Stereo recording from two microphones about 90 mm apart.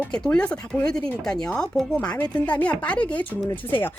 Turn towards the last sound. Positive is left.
turn(degrees=20)  # may be behind; listen again after turning